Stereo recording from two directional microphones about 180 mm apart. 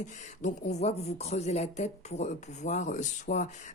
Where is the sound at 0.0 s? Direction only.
40° left (ahead or behind).